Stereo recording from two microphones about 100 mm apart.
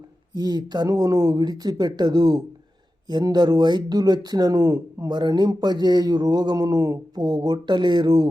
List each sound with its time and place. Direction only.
0.3 s speech: 45° right (ahead or behind)